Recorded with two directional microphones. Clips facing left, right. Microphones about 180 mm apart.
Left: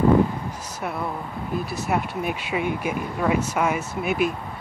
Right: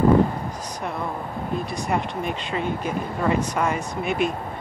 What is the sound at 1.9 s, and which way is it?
Speech, 5° left (ahead or behind).